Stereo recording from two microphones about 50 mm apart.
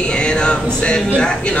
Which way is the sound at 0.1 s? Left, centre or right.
Centre.